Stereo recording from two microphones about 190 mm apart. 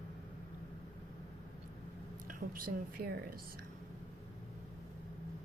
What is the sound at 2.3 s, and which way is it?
A woman's voice, 45° right (ahead or behind).